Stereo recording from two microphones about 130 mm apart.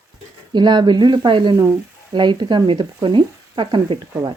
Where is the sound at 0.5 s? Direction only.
35° right (ahead or behind).